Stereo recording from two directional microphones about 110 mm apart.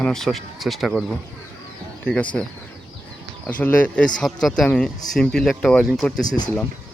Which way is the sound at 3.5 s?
15° left (ahead or behind).